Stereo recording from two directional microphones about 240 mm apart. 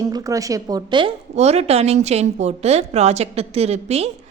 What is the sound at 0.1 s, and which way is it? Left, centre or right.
Speech, centre.